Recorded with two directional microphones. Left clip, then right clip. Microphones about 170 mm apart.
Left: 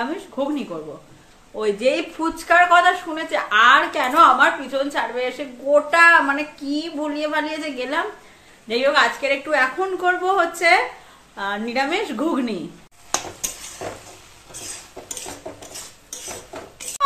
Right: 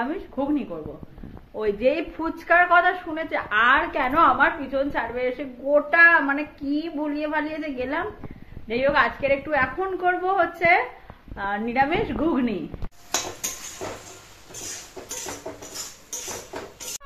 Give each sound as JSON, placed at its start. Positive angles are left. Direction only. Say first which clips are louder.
{"t": 1.6, "sound": "a woman's voice", "louder": "left 3 dB", "side_deg": 5}